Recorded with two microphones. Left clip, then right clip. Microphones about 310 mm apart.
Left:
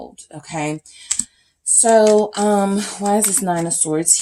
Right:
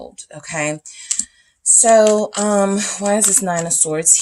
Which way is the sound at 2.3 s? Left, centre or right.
Right.